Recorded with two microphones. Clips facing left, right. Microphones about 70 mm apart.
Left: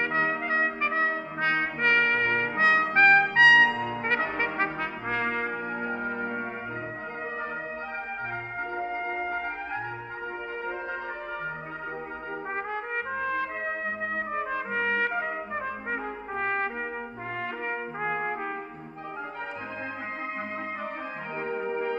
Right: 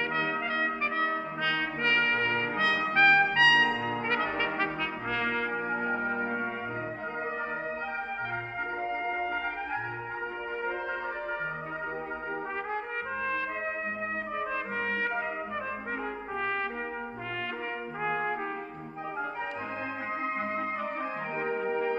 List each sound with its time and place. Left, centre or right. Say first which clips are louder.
0.0 s trumpet: left 3 dB; left
2.9 s trumpet: left 1 dB; left
3.3 s brass instrument: left 5 dB; left
5.7 s music: right 1 dB; centre
8.7 s music: left 1 dB; centre
14.3 s trumpet: left 3 dB; left
16.3 s trumpet: left 3 dB; left
18.0 s trumpet: even; left